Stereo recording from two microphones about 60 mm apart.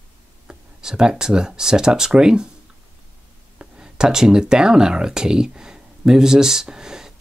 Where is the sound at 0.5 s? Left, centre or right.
Centre.